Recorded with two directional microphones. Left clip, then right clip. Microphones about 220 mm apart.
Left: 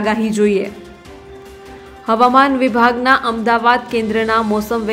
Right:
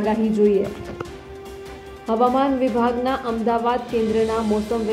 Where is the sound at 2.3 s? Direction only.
15° left (ahead or behind).